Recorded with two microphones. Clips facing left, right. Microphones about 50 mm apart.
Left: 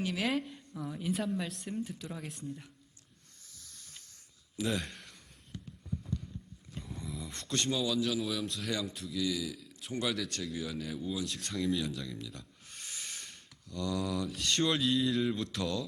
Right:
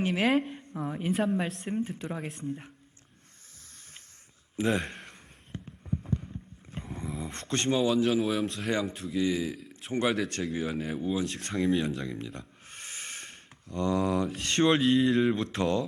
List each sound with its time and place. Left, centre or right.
0.0 s speech: right
0.3 s a woman's voice: right
0.5 s a woman's voice: right
4.5 s a sound: right
8.3 s speech: right
14.8 s speech: right